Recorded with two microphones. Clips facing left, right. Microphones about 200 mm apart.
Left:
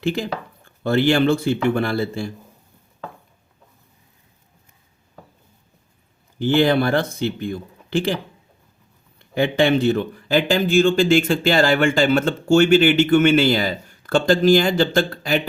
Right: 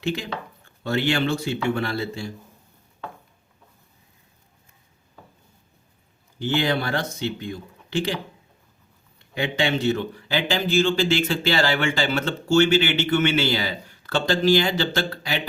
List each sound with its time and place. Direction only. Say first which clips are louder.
0.9 s a man's voice: left 6 dB; 55° left (ahead or behind)
6.4 s speech: left 7 dB; 55° left (ahead or behind)
9.4 s a man's voice: left 6 dB; 55° left (ahead or behind)